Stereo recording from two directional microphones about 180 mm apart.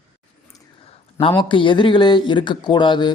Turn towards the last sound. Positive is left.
turn(degrees=25)  # may be behind; listen again after turning